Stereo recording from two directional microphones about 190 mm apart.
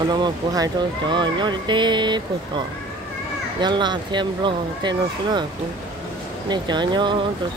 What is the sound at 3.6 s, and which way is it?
Speech, 25° right (ahead or behind).